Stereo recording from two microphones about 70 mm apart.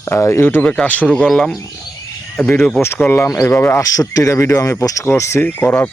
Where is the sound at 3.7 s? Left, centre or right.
Left.